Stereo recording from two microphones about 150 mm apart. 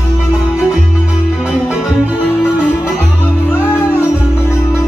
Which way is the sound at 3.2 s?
15° left (ahead or behind).